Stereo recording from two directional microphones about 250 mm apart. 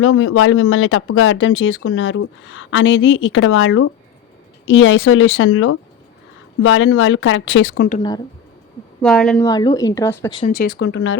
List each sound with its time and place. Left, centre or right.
0.0 s speech: left
9.0 s speech: centre
9.5 s speech: centre
10.3 s speech: left